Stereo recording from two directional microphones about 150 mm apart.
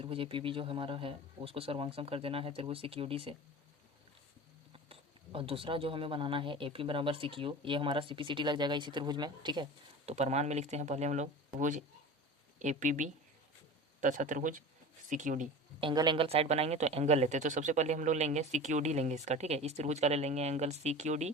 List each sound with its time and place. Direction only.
0.0 s speech: 35° right (ahead or behind)
4.7 s speech: 40° right (ahead or behind)
10.1 s speech: 50° right (ahead or behind)
15.8 s speech: 30° right (ahead or behind); by 21.3 s 50° right (ahead or behind)